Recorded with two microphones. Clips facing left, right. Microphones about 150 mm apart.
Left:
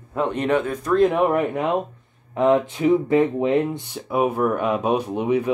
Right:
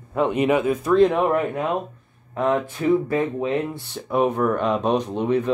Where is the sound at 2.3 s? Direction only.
20° left (ahead or behind).